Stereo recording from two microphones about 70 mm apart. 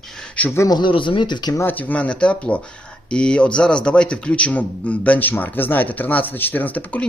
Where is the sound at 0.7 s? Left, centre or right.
Left.